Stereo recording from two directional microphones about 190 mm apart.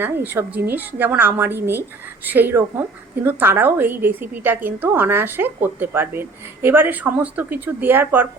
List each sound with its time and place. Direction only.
0.0 s speech: 10° right (ahead or behind)